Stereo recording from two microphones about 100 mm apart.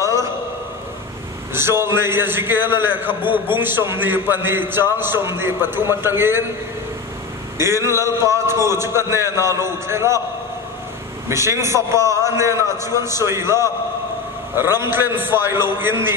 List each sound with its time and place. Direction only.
1.5 s a man's voice: 25° right (ahead or behind)
7.5 s a man's voice: 25° right (ahead or behind)
11.2 s a man's voice: 30° right (ahead or behind)
12.0 s a man's voice: 35° left (ahead or behind)
12.3 s a man's voice: 30° right (ahead or behind)